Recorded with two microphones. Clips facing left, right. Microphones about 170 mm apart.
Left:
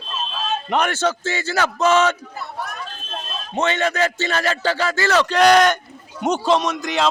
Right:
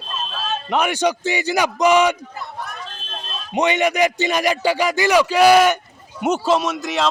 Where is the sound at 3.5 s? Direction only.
15° right (ahead or behind).